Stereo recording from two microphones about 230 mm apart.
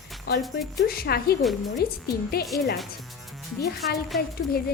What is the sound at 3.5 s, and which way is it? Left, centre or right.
Speech, left.